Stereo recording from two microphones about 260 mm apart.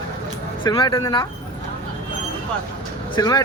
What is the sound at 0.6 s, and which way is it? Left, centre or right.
Speech, centre.